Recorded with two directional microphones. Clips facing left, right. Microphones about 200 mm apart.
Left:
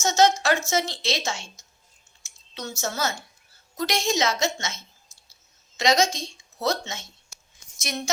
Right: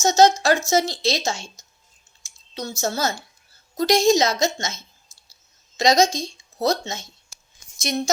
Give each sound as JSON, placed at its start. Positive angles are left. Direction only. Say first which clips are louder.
{"t": 0.0, "sound": "a woman's voice", "louder": "right 4 dB", "side_deg": -35}